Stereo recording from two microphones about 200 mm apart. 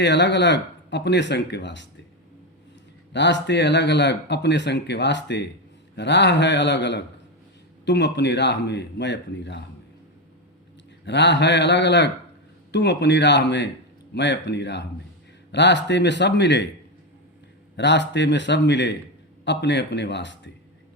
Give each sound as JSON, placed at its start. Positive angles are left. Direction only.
{"t": 0.0, "sound": "speech", "side_deg": 60}
{"t": 3.1, "sound": "speech", "side_deg": 60}
{"t": 11.0, "sound": "speech", "side_deg": 60}
{"t": 17.7, "sound": "speech", "side_deg": 60}